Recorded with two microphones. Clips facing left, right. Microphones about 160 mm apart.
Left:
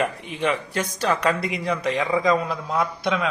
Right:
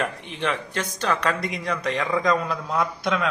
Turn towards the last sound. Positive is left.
turn(degrees=0)  # may be behind; listen again after turning